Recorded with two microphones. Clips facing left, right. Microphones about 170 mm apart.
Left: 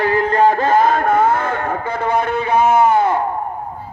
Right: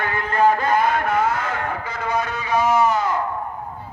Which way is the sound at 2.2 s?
55° left (ahead or behind).